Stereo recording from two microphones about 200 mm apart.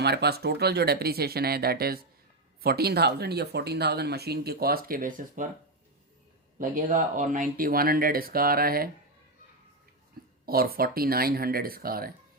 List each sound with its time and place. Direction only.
0.0 s speech: 55° right (ahead or behind)
6.6 s speech: 40° right (ahead or behind)
10.4 s speech: 50° right (ahead or behind)